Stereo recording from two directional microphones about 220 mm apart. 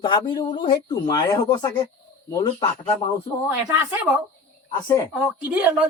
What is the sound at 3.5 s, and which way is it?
Speech, 10° right (ahead or behind).